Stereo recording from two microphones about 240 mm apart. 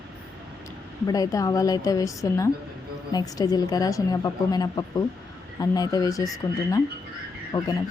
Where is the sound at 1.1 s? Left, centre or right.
Centre.